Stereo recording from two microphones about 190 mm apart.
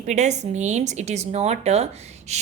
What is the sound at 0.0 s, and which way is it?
Speech, 40° right (ahead or behind).